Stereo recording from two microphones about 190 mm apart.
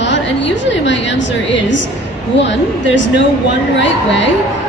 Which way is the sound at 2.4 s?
70° left (ahead or behind).